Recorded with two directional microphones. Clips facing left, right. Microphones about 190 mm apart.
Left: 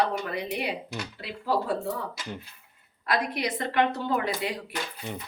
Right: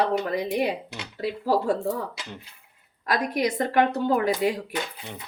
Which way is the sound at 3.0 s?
45° right (ahead or behind).